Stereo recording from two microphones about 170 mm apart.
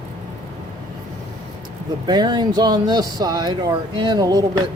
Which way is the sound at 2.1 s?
25° right (ahead or behind).